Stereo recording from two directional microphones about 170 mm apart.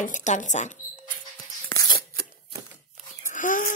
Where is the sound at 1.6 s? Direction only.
15° left (ahead or behind).